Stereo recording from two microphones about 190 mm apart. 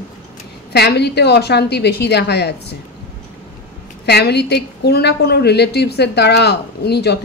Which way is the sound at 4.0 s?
60° left (ahead or behind).